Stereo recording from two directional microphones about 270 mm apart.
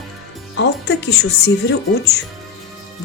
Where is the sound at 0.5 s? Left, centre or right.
Left.